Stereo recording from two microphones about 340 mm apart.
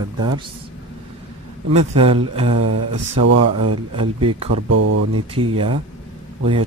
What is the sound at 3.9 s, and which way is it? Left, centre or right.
Speech, centre.